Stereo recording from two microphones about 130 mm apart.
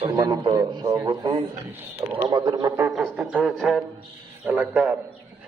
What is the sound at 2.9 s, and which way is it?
A man's voice, centre (ahead or behind).